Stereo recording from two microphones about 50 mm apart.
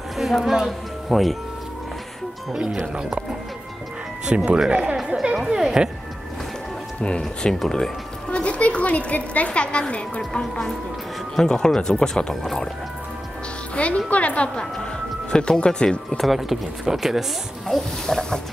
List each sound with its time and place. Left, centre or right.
0.2 s speech: centre
2.5 s speech: centre
4.6 s speech: centre
7.0 s a woman's voice: centre
7.5 s speech: centre
8.3 s a woman's voice: left
13.7 s a woman's voice: left
16.2 s speech: centre
17.7 s speech: centre